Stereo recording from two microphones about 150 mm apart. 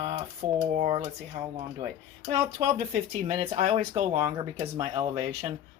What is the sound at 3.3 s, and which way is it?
Speech, 45° right (ahead or behind).